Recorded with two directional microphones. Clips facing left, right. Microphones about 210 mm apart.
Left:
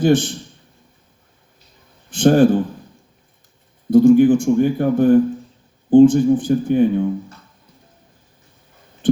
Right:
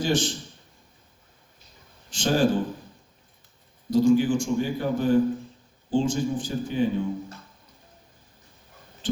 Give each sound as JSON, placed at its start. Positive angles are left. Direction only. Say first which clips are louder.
{"t": 0.0, "sound": "a man's voice", "louder": "left 9 dB", "side_deg": 55}
{"t": 2.0, "sound": "a man's voice", "louder": "left 10 dB", "side_deg": 55}
{"t": 3.8, "sound": "a man's voice", "louder": "left 9 dB", "side_deg": 55}